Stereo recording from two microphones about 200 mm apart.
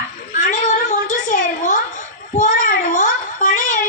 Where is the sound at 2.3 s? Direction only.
40° left (ahead or behind).